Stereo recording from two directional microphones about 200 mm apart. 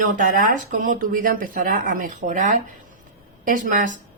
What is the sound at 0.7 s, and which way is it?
Speech, 40° right (ahead or behind).